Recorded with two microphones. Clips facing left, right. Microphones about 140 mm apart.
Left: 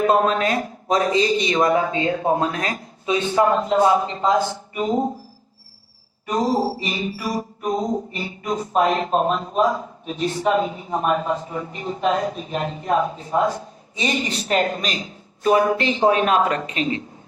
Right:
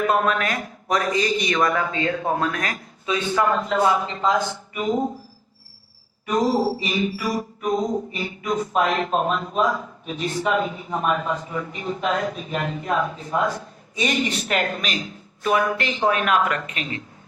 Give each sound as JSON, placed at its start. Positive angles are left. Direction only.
{"t": 0.0, "sound": "a man's voice", "side_deg": 30}
{"t": 6.2, "sound": "a sound", "side_deg": 35}
{"t": 12.0, "sound": "a man's voice", "side_deg": 30}